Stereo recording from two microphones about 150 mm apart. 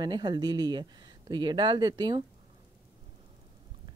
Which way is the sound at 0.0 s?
30° right (ahead or behind).